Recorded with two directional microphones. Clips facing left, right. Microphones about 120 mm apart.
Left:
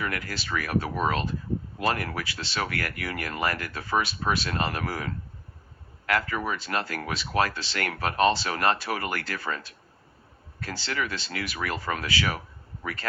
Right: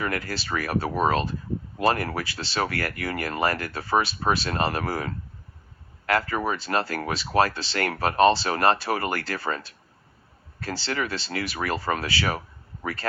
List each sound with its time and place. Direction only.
0.0 s speech: 35° right (ahead or behind)